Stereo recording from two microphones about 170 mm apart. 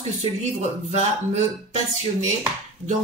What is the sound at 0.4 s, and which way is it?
Speech, 40° right (ahead or behind).